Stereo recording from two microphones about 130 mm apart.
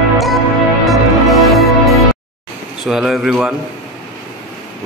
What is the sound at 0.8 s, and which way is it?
Music, centre (ahead or behind).